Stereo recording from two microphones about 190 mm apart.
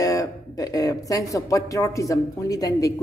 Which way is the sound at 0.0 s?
20° left (ahead or behind).